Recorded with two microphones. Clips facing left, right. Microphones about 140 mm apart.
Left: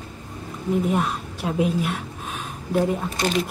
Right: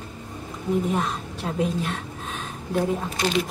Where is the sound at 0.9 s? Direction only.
10° left (ahead or behind).